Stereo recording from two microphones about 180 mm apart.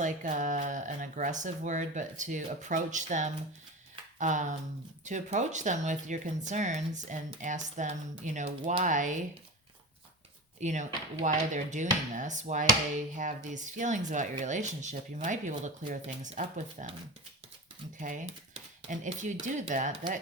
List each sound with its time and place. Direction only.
0.0 s speech: 45° right (ahead or behind)
10.6 s speech: 40° right (ahead or behind)
18.0 s speech: 45° right (ahead or behind)